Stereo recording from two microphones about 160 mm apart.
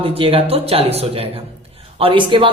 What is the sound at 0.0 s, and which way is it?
A woman's voice, 35° right (ahead or behind).